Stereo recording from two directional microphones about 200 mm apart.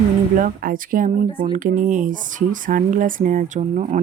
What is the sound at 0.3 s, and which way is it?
Speech, 45° right (ahead or behind).